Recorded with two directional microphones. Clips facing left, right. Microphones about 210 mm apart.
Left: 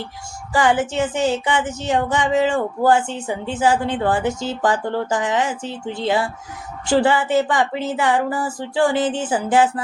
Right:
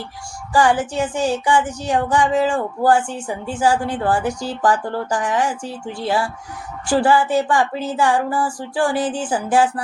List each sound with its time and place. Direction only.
0.5 s speech: 20° left (ahead or behind)